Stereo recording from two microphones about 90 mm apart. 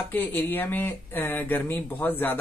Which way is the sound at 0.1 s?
20° left (ahead or behind).